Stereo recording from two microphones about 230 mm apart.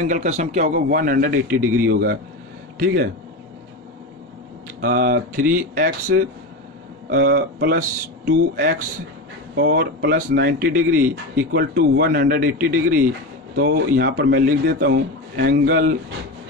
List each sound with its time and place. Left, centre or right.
0.1 s a man's voice: right
4.8 s a man's voice: right